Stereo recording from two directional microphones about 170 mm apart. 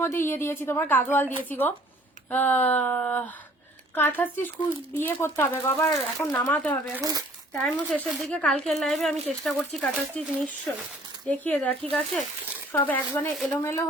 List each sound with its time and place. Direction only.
0.0 s speech: 15° left (ahead or behind)
7.0 s speech: 20° right (ahead or behind)
7.5 s speech: 5° left (ahead or behind)
13.6 s speech: 15° left (ahead or behind)